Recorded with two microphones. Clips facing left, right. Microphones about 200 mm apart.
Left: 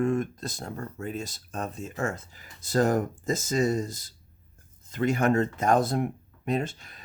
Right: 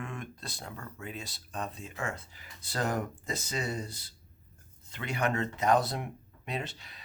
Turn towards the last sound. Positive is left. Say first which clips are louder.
# left 9 dB
turn(degrees=45)  # may be behind; listen again after turning